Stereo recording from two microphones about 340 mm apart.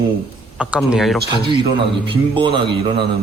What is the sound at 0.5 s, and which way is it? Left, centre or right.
Speech, centre.